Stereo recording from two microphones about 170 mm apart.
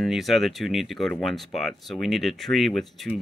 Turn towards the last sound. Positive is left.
turn(degrees=0)  # may be behind; listen again after turning